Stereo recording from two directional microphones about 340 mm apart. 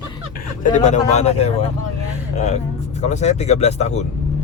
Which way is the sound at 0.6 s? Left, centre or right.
Left.